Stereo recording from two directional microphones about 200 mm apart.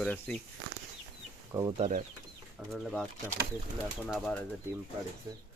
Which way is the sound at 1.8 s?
40° right (ahead or behind).